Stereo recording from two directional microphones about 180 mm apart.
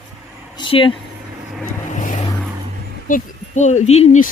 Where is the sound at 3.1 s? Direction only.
40° left (ahead or behind).